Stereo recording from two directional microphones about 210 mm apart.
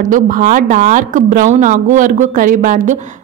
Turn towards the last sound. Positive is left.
turn(degrees=-35)  # may be behind; listen again after turning